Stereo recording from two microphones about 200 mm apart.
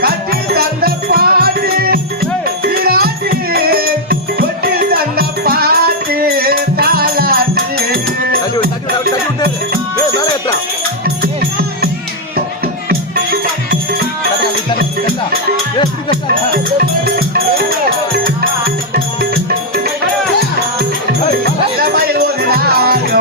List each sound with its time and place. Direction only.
0.0 s music: 50° right (ahead or behind)
21.8 s music: 50° right (ahead or behind)